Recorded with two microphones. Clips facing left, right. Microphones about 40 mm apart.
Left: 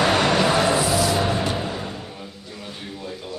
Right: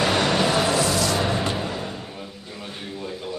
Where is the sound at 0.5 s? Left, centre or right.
Left.